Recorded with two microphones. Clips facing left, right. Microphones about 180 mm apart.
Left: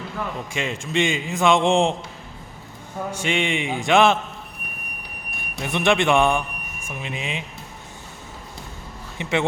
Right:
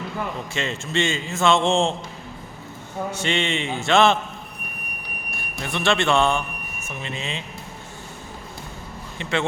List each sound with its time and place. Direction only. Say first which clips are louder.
0.5 s a man's voice: left 2 dB; 10° left (ahead or behind)
3.1 s a man's voice: left 1 dB; 10° left (ahead or behind)
5.4 s a man's voice: left 3 dB; 20° left (ahead or behind)
9.1 s a man's voice: left 2 dB; 20° left (ahead or behind)